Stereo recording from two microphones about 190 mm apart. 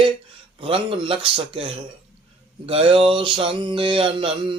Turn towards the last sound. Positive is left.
turn(degrees=-25)  # may be behind; listen again after turning